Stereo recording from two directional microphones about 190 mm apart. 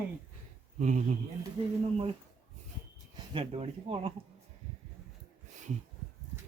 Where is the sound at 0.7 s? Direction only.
40° right (ahead or behind).